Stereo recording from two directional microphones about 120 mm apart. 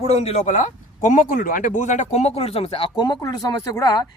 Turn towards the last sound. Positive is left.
turn(degrees=30)  # may be behind; listen again after turning